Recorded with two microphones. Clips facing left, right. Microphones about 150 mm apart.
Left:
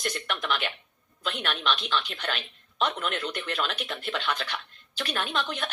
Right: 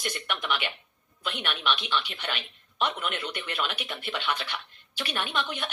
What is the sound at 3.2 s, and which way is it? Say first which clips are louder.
Speech: left 2 dB; 45° left (ahead or behind).